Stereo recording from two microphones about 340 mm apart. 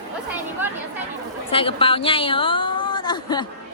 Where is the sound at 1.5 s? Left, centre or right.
Centre.